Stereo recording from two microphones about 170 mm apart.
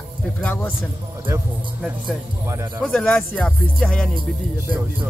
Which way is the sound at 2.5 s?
20° right (ahead or behind).